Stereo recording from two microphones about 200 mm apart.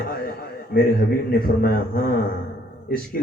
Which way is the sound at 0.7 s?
50° left (ahead or behind).